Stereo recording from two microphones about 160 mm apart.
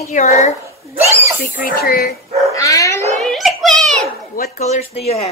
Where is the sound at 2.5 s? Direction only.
20° left (ahead or behind).